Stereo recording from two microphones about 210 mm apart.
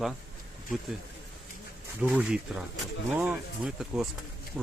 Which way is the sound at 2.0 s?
5° right (ahead or behind).